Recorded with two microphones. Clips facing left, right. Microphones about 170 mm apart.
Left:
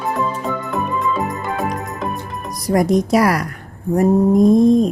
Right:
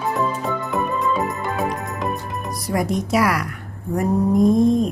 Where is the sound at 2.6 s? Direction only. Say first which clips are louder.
Left 7 dB; 40° left (ahead or behind).